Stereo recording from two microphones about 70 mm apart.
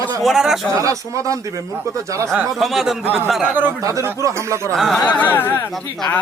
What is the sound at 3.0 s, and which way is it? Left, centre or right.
Speech, right.